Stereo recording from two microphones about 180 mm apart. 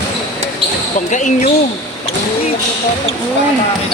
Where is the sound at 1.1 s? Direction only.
45° left (ahead or behind).